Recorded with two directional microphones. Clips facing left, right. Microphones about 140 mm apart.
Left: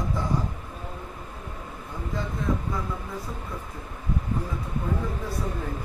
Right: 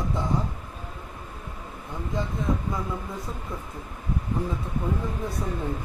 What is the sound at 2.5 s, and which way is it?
Speech, 20° right (ahead or behind).